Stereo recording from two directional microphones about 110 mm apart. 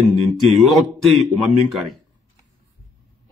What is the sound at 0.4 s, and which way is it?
A man's voice, centre (ahead or behind).